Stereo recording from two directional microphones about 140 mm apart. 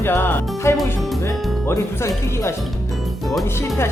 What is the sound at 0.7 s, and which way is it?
Speech, centre (ahead or behind).